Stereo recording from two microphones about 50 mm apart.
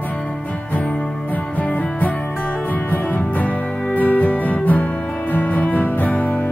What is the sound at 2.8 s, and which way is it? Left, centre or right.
Music, left.